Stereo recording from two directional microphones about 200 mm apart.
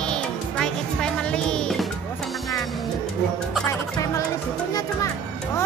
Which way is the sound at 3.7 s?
15° left (ahead or behind).